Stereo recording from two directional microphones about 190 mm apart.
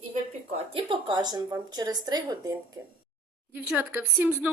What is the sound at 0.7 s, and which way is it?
A woman's voice, 25° right (ahead or behind).